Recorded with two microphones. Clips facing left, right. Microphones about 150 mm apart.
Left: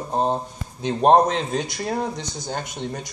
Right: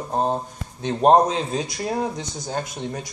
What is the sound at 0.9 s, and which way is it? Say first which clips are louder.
Speech: even; centre (ahead or behind).